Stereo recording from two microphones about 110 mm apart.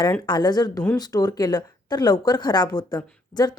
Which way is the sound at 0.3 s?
40° left (ahead or behind).